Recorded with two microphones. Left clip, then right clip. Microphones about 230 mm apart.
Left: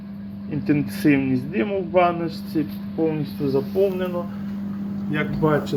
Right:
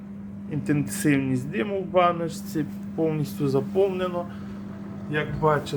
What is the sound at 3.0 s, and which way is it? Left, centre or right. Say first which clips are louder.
Speech: left 2 dB; centre.